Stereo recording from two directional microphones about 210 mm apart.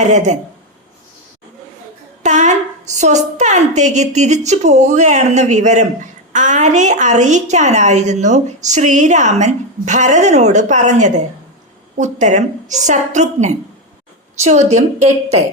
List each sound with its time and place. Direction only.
0.1 s a woman's voice: 35° right (ahead or behind)
2.2 s a sound: 35° right (ahead or behind)
3.3 s a woman's voice: 35° right (ahead or behind)